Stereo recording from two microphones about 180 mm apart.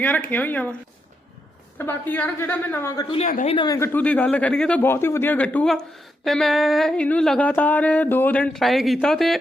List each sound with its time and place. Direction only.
0.0 s speech: 10° left (ahead or behind)
1.8 s speech: 10° left (ahead or behind)
3.2 s speech: 40° left (ahead or behind)
3.5 s speech: 25° left (ahead or behind)
3.8 s speech: 10° left (ahead or behind)
6.2 s a sound: centre (ahead or behind)